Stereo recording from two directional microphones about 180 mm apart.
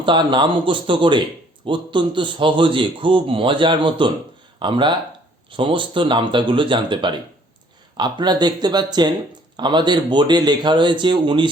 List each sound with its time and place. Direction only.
0.0 s a man's voice: 25° right (ahead or behind)